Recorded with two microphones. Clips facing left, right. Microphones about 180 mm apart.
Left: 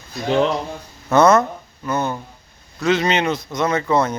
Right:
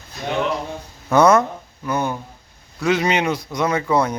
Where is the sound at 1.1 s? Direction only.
10° right (ahead or behind).